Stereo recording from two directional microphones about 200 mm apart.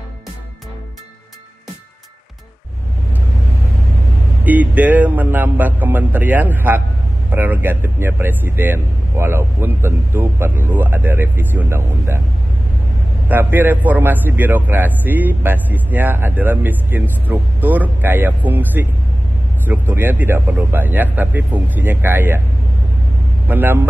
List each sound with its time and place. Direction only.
4.5 s a man's voice: 10° right (ahead or behind)
13.3 s a man's voice: 10° right (ahead or behind)
23.4 s speech: 10° right (ahead or behind)